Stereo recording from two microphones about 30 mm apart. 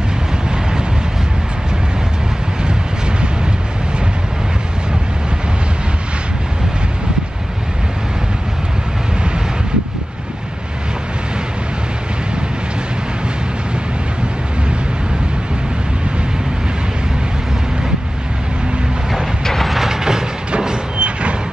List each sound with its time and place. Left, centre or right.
19.4 s mechanisms: centre
19.9 s a sound: centre
20.5 s vehicle: right